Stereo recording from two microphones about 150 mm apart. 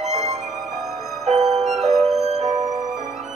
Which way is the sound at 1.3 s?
50° right (ahead or behind).